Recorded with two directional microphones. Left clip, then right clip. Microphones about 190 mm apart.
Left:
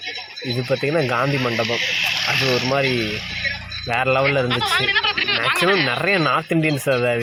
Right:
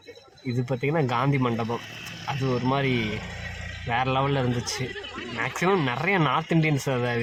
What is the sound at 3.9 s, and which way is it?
Speech, 10° left (ahead or behind).